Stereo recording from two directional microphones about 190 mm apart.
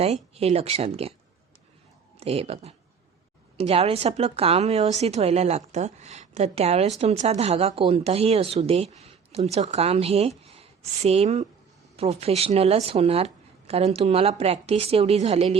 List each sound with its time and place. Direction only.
0.0 s a woman's voice: 35° right (ahead or behind)
2.1 s a woman's voice: 30° right (ahead or behind)